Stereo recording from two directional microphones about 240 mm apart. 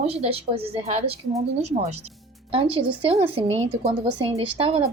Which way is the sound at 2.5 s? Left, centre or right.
Right.